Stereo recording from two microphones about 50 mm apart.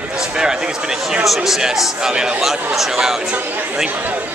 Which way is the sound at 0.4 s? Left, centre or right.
Centre.